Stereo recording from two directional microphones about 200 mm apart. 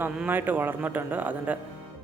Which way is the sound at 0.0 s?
5° right (ahead or behind).